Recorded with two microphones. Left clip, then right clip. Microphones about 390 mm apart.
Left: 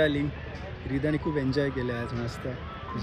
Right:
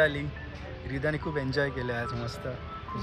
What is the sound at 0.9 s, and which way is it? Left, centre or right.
Speech, centre.